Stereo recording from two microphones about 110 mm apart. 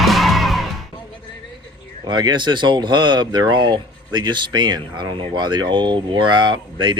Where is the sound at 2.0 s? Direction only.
40° right (ahead or behind).